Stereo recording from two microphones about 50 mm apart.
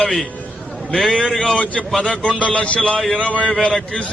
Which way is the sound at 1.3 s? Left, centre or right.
Centre.